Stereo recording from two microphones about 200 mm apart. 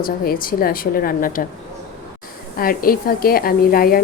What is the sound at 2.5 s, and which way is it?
Speech, 45° left (ahead or behind).